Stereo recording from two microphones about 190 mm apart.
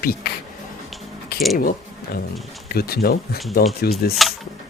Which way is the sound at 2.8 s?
55° left (ahead or behind).